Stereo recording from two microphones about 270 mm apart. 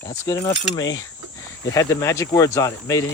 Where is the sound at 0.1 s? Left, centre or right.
Centre.